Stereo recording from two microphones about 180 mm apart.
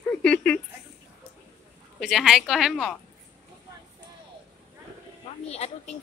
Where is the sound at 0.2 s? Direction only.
5° left (ahead or behind).